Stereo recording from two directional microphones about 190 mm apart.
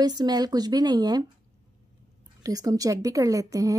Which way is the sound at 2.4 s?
20° right (ahead or behind).